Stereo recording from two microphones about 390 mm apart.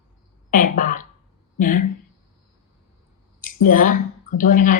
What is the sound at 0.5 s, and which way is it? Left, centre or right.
A woman's voice, left.